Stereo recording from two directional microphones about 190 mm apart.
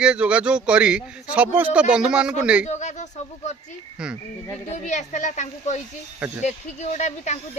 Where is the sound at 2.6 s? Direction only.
40° left (ahead or behind).